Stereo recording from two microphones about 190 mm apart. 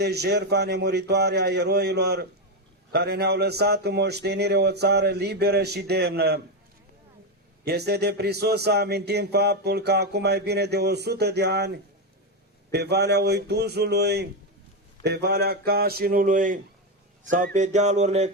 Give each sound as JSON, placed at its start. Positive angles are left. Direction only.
{"t": 0.0, "sound": "a man's voice", "side_deg": -60}
{"t": 7.6, "sound": "a man's voice", "side_deg": -60}
{"t": 17.2, "sound": "a sound", "side_deg": -45}